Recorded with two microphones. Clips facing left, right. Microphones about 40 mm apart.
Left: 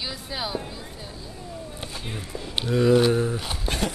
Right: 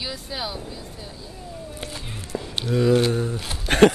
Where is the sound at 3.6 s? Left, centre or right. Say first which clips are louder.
Right 14 dB; right.